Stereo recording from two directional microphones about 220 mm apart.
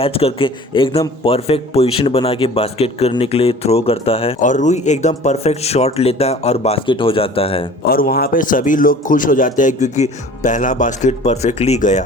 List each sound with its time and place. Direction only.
0.0 s a man's voice: 25° left (ahead or behind)
7.9 s a man's voice: 40° left (ahead or behind)